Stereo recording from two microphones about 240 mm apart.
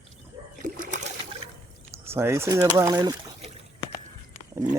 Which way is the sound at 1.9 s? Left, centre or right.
Centre.